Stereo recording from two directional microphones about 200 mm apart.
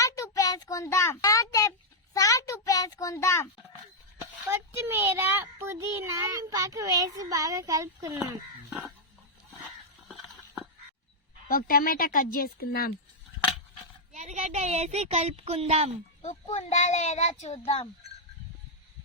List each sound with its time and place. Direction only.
0.0 s child singing: 15° left (ahead or behind)
2.1 s a sound: 15° left (ahead or behind)
4.4 s a child's voice: 10° right (ahead or behind)
10.1 s a sound: centre (ahead or behind)
11.4 s speech: 45° left (ahead or behind)
14.1 s speech: 35° right (ahead or behind)
16.2 s a child's voice: 35° left (ahead or behind)